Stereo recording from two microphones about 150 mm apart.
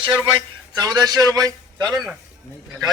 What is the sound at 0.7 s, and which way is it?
A man's voice, 25° right (ahead or behind).